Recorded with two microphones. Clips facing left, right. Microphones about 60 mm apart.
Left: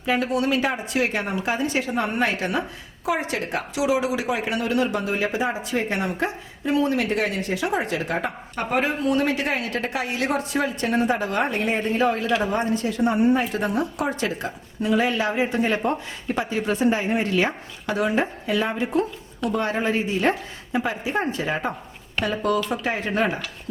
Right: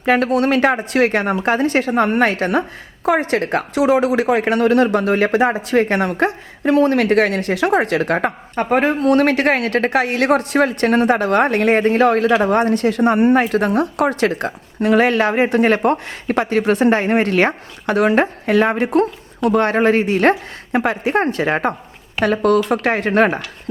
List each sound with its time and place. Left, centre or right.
0.0 s speech: right
8.5 s speech: right